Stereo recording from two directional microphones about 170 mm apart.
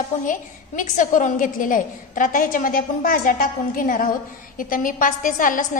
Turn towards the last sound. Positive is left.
turn(degrees=50)  # may be behind; listen again after turning